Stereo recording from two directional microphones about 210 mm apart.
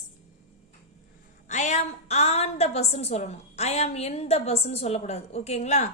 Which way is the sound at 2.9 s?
30° left (ahead or behind).